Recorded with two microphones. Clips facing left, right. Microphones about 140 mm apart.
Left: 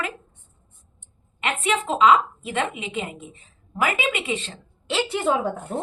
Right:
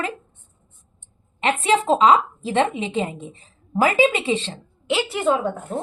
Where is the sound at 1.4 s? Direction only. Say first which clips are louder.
Right 5 dB; 30° right (ahead or behind).